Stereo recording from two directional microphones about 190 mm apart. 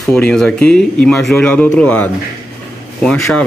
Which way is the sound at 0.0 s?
5° left (ahead or behind).